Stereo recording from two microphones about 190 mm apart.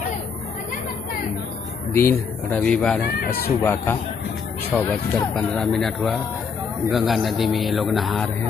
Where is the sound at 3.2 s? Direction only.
50° left (ahead or behind).